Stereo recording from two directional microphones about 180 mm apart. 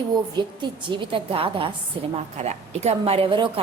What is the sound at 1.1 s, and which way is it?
A woman's voice, 30° right (ahead or behind).